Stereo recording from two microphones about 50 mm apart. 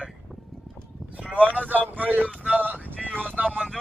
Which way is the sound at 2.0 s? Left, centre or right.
Right.